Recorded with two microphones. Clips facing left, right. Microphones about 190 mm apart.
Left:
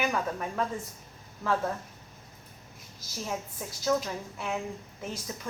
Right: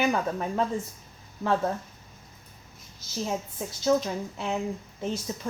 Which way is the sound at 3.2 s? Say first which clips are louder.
Right 4 dB; 25° right (ahead or behind).